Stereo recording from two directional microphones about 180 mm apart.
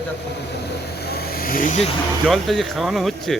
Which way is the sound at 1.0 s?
60° left (ahead or behind).